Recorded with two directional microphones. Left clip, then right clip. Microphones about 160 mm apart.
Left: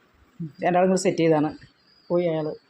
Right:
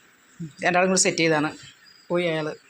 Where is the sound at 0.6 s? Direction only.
25° left (ahead or behind).